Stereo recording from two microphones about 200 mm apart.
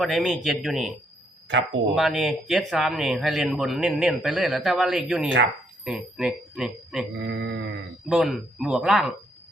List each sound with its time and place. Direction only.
0.0 s speech: centre (ahead or behind)
1.5 s speech: 65° right (ahead or behind)
2.0 s speech: centre (ahead or behind)
7.2 s speech: 60° right (ahead or behind)
8.1 s speech: centre (ahead or behind)